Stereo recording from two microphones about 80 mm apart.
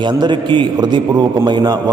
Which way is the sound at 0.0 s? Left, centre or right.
Right.